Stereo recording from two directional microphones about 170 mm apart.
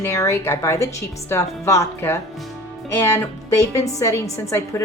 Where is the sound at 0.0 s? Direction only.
15° left (ahead or behind).